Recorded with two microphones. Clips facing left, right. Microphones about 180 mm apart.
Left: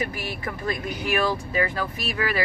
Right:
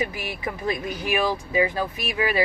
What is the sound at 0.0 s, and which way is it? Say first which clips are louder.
Speech: right 1 dB; 15° right (ahead or behind).